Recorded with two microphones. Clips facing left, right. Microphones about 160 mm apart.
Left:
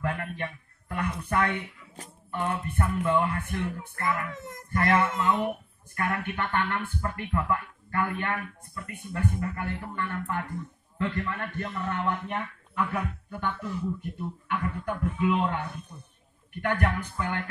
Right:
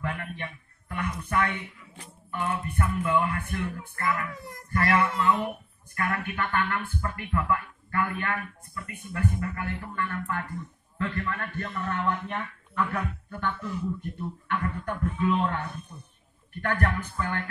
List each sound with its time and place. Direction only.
0.0 s a sound: 45° left (ahead or behind)
1.1 s a man's voice: 35° left (ahead or behind); by 15.6 s 10° left (ahead or behind)
16.6 s a man's voice: 15° left (ahead or behind)